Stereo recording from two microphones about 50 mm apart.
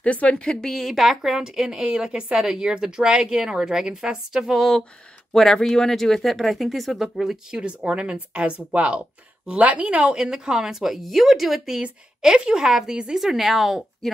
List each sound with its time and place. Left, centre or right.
0.0 s a woman's voice: left
0.4 s a woman's voice: centre
4.6 s speech: centre
7.6 s speech: right
10.1 s a woman's voice: centre